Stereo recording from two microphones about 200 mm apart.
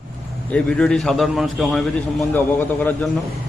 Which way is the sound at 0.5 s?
5° left (ahead or behind).